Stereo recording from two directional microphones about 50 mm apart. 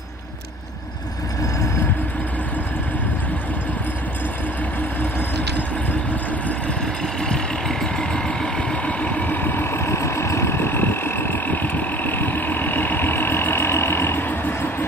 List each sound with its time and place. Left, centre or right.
7.2 s vehicle: centre
9.0 s vehicle: left